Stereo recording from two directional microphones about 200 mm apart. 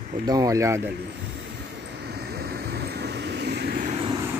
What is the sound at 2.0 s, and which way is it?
Vehicle, 55° right (ahead or behind).